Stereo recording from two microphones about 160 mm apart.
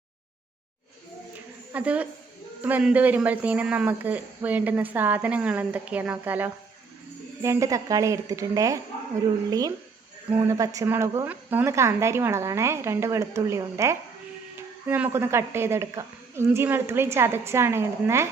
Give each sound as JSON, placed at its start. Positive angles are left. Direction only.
{"t": 1.7, "sound": "a woman's voice", "side_deg": -10}